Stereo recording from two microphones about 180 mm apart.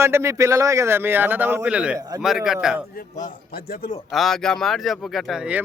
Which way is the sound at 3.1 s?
50° left (ahead or behind).